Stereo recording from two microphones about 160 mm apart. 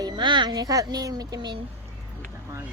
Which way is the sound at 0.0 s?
30° right (ahead or behind).